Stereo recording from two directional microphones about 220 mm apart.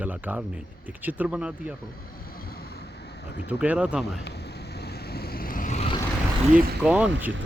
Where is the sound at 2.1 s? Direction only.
45° left (ahead or behind).